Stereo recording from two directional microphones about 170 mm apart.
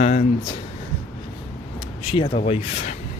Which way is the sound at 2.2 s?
40° left (ahead or behind).